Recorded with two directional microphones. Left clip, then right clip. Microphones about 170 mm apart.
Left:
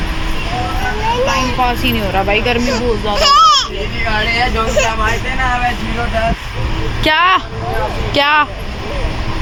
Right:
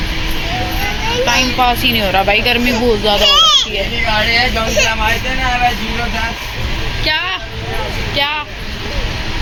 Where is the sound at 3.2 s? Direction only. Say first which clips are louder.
Left 2 dB; 65° left (ahead or behind).